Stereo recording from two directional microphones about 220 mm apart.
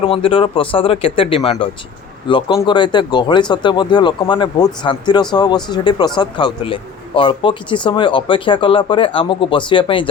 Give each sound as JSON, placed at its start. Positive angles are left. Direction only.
{"t": 0.1, "sound": "speech", "side_deg": 25}